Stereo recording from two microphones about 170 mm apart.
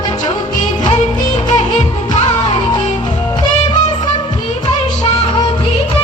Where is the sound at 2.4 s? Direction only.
25° left (ahead or behind).